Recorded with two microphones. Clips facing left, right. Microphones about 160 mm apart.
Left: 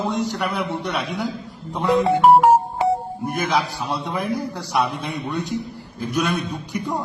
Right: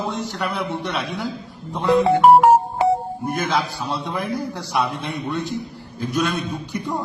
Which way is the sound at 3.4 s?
Centre (ahead or behind).